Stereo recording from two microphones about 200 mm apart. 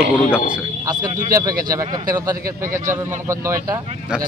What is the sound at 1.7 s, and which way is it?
Speech, 20° right (ahead or behind).